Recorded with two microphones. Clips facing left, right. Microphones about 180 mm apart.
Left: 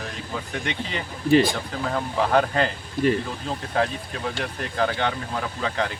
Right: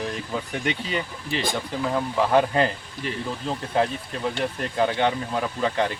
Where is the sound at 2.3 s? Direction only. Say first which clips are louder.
Right 1 dB; 5° right (ahead or behind).